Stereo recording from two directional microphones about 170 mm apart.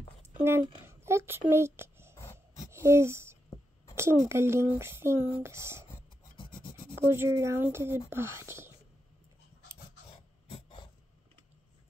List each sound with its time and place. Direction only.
0.4 s speech: 15° right (ahead or behind)
1.5 s a sound: 15° right (ahead or behind)
2.7 s speech: 15° right (ahead or behind)
6.3 s filing: 30° left (ahead or behind)
7.1 s speech: 15° right (ahead or behind)
10.1 s a sound: 30° left (ahead or behind)